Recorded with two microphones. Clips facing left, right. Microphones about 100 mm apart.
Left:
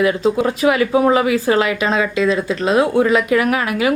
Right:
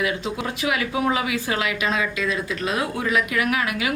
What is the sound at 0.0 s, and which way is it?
A woman's voice, 40° left (ahead or behind).